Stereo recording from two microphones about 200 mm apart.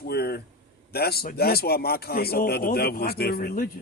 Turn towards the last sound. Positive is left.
turn(degrees=45)  # may be behind; listen again after turning